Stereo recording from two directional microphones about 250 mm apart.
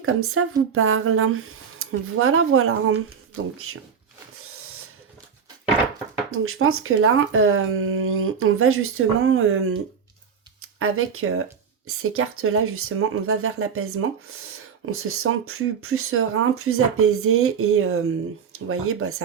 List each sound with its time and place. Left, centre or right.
0.0 s speech: right
6.3 s speech: right